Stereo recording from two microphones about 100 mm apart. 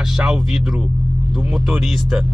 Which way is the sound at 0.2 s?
5° right (ahead or behind).